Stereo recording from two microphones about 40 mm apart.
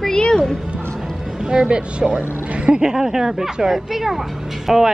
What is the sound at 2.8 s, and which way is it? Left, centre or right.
A woman's voice, centre.